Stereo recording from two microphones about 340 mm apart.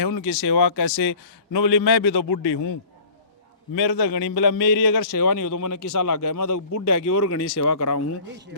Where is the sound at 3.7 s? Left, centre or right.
Left.